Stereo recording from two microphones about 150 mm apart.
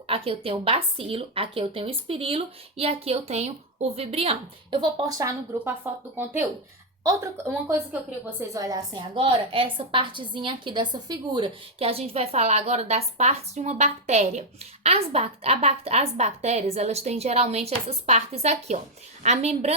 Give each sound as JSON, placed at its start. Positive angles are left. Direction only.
{"t": 0.1, "sound": "a woman's voice", "side_deg": -40}
{"t": 5.5, "sound": "a woman's voice", "side_deg": -15}